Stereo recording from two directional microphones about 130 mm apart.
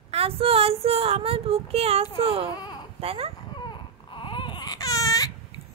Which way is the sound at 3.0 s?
50° right (ahead or behind).